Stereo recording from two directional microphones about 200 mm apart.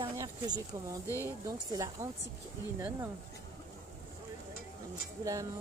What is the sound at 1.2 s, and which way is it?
Speech, 15° right (ahead or behind).